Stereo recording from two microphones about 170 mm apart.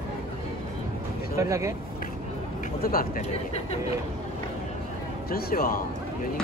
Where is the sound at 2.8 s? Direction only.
60° left (ahead or behind).